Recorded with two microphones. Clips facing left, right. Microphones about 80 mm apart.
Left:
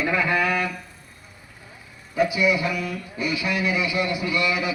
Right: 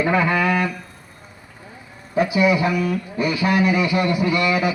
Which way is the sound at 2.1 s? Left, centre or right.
Right.